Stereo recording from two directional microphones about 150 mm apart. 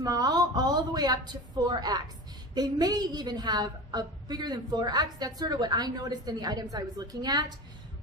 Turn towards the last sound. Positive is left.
turn(degrees=-25)  # may be behind; listen again after turning